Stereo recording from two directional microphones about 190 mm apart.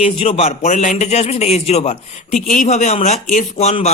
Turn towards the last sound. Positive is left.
turn(degrees=35)  # may be behind; listen again after turning